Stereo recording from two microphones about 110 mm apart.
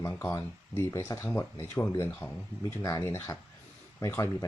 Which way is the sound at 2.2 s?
35° left (ahead or behind).